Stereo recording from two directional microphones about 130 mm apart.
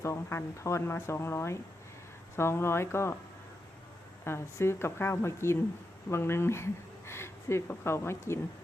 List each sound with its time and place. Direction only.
0.0 s speech: 20° left (ahead or behind)
4.2 s speech: 20° left (ahead or behind)